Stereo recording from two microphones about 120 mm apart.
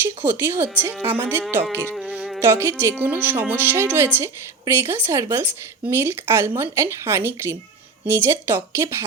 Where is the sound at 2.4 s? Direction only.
20° right (ahead or behind).